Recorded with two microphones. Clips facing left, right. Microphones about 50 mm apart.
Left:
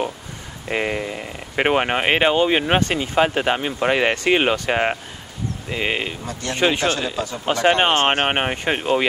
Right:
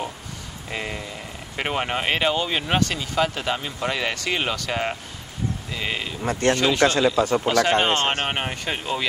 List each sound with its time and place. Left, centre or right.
0.7 s speech: left
7.2 s speech: right
7.4 s speech: left